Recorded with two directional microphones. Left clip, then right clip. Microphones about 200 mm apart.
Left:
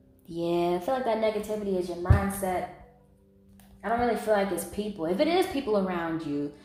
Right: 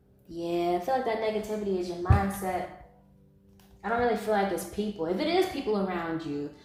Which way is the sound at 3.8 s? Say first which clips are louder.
Left 1 dB; 35° left (ahead or behind).